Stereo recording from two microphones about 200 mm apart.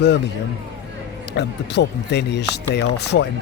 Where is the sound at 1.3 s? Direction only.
60° left (ahead or behind).